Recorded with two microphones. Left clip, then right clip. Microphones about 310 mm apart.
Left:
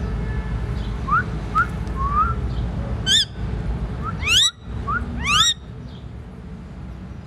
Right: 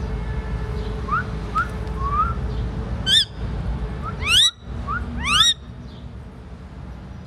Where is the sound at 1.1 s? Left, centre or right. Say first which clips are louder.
Left 3 dB; centre.